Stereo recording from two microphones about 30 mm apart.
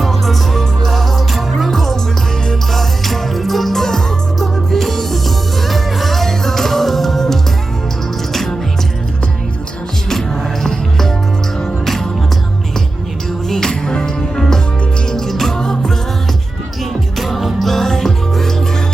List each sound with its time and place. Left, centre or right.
0.0 s music: centre
10.1 s music: centre
13.7 s music: left
17.2 s music: centre